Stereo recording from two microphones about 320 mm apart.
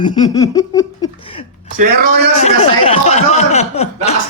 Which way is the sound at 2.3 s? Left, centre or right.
Centre.